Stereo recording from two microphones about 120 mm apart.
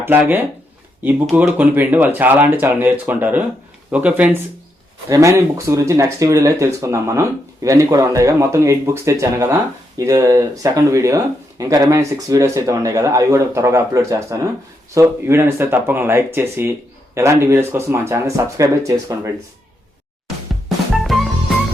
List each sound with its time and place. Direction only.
0.0 s speech: 15° right (ahead or behind)
1.4 s speech: 15° right (ahead or behind)
5.0 s speech: 25° right (ahead or behind)
20.7 s music: centre (ahead or behind)